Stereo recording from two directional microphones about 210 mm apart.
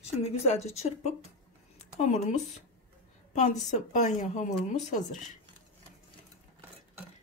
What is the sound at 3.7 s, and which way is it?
Speech, 35° left (ahead or behind).